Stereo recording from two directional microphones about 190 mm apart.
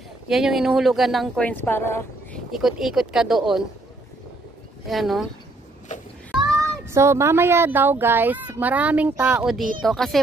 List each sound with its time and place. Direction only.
0.3 s speech: centre (ahead or behind)
2.6 s speech: centre (ahead or behind)
4.8 s speech: centre (ahead or behind)
5.9 s a sound: 40° left (ahead or behind)
6.9 s speech: 15° right (ahead or behind); by 10.1 s centre (ahead or behind)